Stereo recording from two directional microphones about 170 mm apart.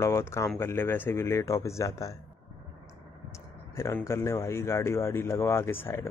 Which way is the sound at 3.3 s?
15° left (ahead or behind).